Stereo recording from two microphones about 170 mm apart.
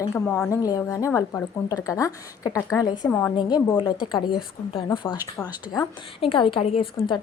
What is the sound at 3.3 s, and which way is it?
A woman's voice, 25° left (ahead or behind).